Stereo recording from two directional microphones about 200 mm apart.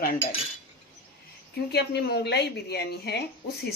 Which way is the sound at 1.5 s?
55° left (ahead or behind).